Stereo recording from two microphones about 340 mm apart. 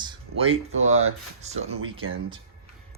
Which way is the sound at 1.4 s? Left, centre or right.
Centre.